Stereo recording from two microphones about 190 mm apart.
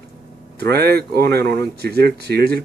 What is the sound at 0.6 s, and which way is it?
Speech, 55° right (ahead or behind).